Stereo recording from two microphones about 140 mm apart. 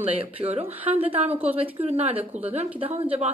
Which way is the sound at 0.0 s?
45° right (ahead or behind).